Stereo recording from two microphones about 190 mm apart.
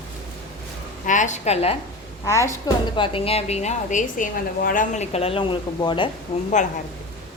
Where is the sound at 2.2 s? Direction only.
15° left (ahead or behind).